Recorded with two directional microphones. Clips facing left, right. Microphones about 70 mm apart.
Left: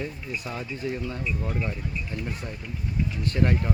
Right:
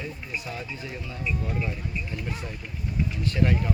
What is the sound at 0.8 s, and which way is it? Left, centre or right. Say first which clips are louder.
Speech: left 7 dB; left.